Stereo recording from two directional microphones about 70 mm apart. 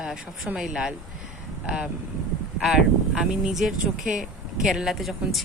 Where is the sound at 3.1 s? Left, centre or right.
Centre.